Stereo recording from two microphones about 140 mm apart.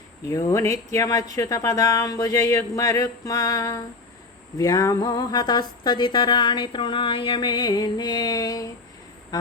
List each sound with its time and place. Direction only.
0.3 s speech: 25° left (ahead or behind)